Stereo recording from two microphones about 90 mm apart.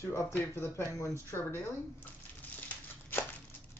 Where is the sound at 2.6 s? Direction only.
25° left (ahead or behind).